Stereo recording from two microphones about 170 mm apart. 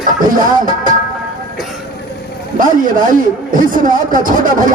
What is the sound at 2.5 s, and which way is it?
A man's voice, 50° right (ahead or behind).